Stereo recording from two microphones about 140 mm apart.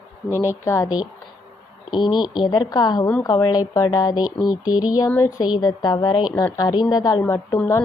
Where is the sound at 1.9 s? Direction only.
30° left (ahead or behind).